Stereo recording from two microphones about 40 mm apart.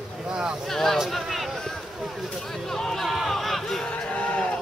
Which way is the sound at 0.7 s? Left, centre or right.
Centre.